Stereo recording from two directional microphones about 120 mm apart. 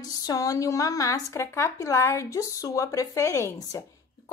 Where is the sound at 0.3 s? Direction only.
30° left (ahead or behind).